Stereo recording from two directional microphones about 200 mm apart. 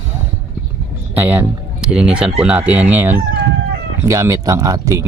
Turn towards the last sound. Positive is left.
turn(degrees=-15)  # may be behind; listen again after turning